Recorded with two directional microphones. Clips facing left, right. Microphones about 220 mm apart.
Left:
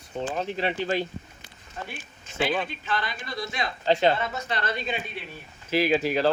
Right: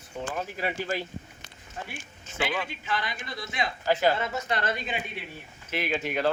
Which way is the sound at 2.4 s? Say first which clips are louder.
Left 4 dB; 30° left (ahead or behind).